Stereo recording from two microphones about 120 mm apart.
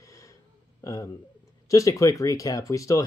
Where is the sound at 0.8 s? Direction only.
30° left (ahead or behind).